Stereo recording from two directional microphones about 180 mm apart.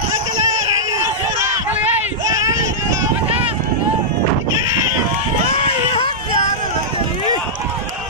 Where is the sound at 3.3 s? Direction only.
35° right (ahead or behind).